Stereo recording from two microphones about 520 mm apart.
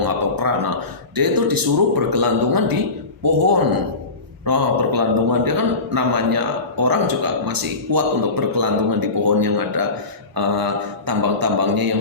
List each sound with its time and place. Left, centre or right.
0.0 s a man's voice: right